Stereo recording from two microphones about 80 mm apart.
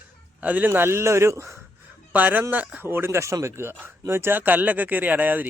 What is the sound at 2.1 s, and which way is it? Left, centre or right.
Speech, right.